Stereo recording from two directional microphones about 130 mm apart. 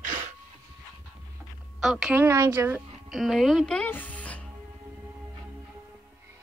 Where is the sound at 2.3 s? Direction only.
20° right (ahead or behind).